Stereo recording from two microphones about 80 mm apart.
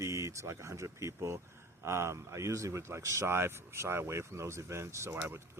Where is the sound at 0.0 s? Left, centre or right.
Right.